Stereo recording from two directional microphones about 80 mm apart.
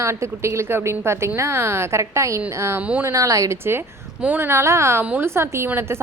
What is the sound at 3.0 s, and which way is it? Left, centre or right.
Speech, right.